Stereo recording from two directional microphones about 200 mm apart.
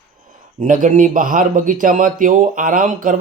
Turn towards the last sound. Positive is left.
turn(degrees=-40)  # may be behind; listen again after turning